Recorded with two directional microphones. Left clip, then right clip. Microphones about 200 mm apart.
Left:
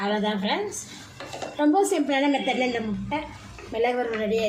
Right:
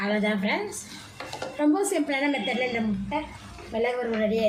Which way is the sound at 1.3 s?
15° left (ahead or behind).